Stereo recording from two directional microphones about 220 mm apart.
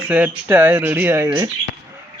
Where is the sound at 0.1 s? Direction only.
5° right (ahead or behind).